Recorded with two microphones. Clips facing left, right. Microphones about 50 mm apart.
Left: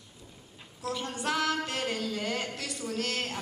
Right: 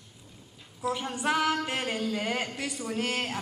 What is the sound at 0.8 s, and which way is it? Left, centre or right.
Speech, centre.